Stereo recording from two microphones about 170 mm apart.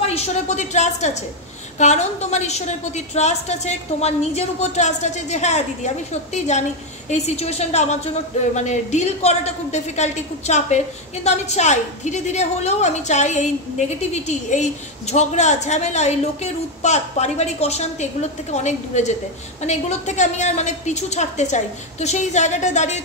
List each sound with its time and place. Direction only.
0.0 s a woman's voice: 35° left (ahead or behind)